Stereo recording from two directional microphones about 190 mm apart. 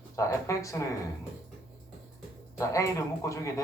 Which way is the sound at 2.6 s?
15° left (ahead or behind).